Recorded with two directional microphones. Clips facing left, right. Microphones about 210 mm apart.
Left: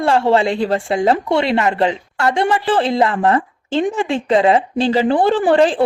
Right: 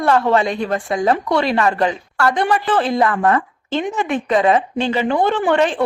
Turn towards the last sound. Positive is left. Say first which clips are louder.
# left 3 dB
turn(degrees=30)  # may be behind; listen again after turning